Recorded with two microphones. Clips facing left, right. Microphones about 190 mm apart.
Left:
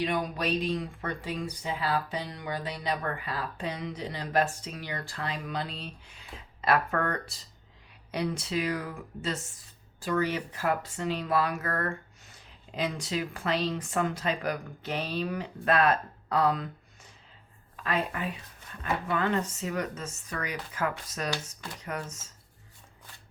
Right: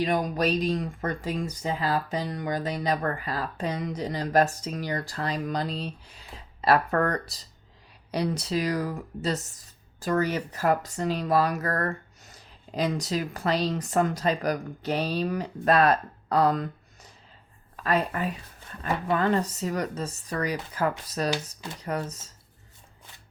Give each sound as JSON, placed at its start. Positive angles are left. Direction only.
{"t": 0.0, "sound": "speech", "side_deg": -40}